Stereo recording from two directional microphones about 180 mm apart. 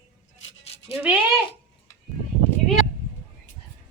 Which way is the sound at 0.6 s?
35° left (ahead or behind).